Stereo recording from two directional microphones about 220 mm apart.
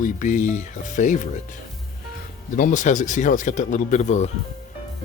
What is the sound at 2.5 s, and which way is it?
Speech, 35° left (ahead or behind).